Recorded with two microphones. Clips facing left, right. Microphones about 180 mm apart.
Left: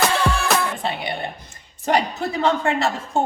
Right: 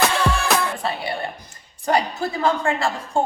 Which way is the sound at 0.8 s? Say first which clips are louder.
Even; 20° left (ahead or behind).